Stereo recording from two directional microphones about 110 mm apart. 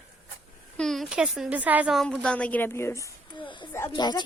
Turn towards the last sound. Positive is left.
turn(degrees=40)  # may be behind; listen again after turning